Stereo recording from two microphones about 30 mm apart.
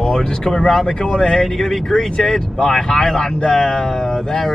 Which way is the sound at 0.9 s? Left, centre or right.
Left.